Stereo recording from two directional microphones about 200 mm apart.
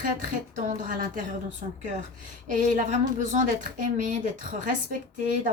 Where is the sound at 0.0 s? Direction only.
40° right (ahead or behind).